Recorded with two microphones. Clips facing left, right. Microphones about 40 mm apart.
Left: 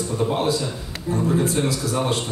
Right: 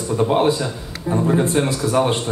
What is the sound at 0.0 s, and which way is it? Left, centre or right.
A man's voice, right.